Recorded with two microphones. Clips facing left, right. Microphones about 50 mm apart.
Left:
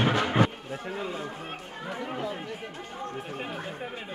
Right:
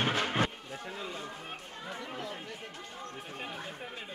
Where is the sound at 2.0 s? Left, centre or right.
Left.